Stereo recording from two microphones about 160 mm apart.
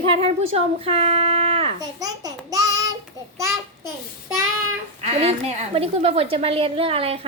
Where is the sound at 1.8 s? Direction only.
25° right (ahead or behind).